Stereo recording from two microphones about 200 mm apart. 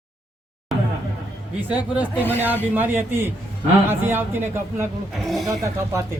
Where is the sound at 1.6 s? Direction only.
5° right (ahead or behind).